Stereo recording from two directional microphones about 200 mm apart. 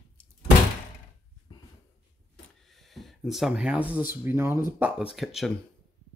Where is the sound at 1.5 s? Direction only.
25° left (ahead or behind).